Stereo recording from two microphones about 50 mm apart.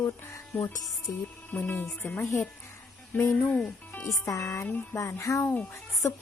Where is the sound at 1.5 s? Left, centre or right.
Left.